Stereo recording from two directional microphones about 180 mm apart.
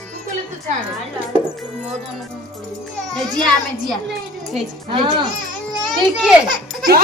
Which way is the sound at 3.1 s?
Centre (ahead or behind).